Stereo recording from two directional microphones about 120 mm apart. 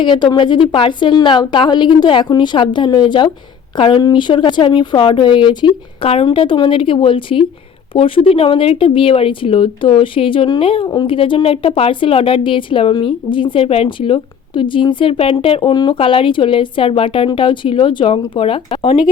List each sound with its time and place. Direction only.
0.0 s a woman's voice: 40° left (ahead or behind)
15.7 s a woman's voice: 35° left (ahead or behind)
16.0 s speech: 45° left (ahead or behind)